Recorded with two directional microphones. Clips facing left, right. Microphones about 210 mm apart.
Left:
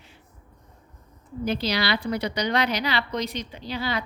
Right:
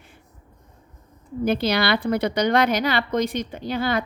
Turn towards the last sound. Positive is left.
turn(degrees=-50)  # may be behind; listen again after turning